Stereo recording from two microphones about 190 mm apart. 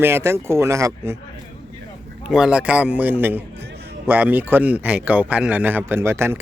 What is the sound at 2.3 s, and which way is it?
Speech, 5° right (ahead or behind).